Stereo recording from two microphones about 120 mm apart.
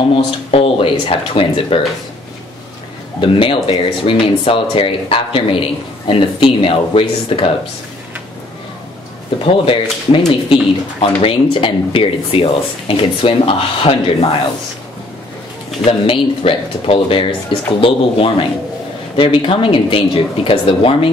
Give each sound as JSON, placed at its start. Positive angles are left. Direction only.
{"t": 0.1, "sound": "speech", "side_deg": 50}
{"t": 3.2, "sound": "speech", "side_deg": 45}
{"t": 9.4, "sound": "speech", "side_deg": 50}
{"t": 15.8, "sound": "speech", "side_deg": 50}